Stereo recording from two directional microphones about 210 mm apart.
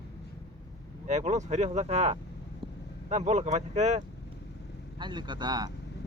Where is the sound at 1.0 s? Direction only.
35° right (ahead or behind).